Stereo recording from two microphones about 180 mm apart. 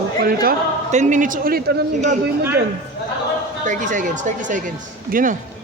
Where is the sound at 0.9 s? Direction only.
45° right (ahead or behind); by 1.8 s 60° right (ahead or behind).